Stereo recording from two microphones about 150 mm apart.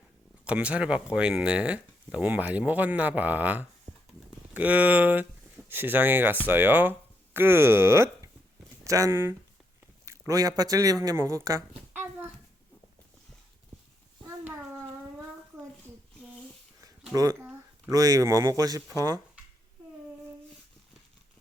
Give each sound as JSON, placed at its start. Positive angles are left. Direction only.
{"t": 0.4, "sound": "speech", "side_deg": -10}
{"t": 10.1, "sound": "a sound", "side_deg": -25}
{"t": 10.6, "sound": "a child's voice", "side_deg": -25}
{"t": 17.1, "sound": "speech", "side_deg": -25}